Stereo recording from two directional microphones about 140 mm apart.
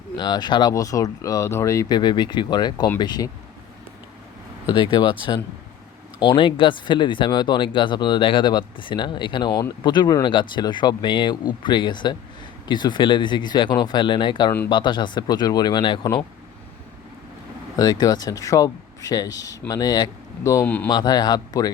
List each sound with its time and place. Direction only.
0.2 s speech: 30° left (ahead or behind)
4.7 s speech: 30° left (ahead or behind)
6.1 s speech: 35° left (ahead or behind)
17.7 s speech: 30° left (ahead or behind)
20.7 s a man's voice: 10° left (ahead or behind)
20.9 s speech: 30° left (ahead or behind)